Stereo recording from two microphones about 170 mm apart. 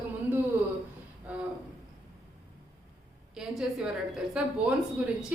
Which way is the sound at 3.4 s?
5° right (ahead or behind).